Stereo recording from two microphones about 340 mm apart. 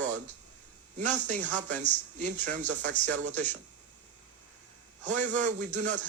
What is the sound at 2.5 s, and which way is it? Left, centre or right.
Speech, right.